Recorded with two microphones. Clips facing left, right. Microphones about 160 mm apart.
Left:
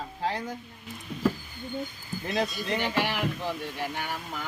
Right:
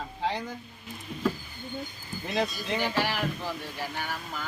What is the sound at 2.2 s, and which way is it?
Speech, centre (ahead or behind).